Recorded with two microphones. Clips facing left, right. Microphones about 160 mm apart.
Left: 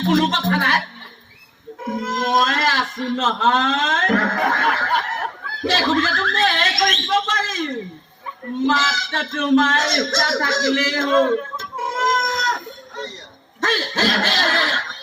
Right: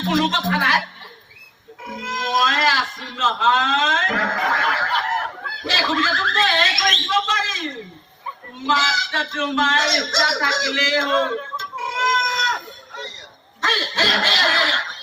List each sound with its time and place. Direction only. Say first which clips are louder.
0.1 s speech: left 2 dB; 50° left (ahead or behind)
1.8 s speech: left 6 dB; 50° left (ahead or behind)
11.5 s a sound: left 2 dB; 50° left (ahead or behind)
13.6 s speech: left 3 dB; 50° left (ahead or behind)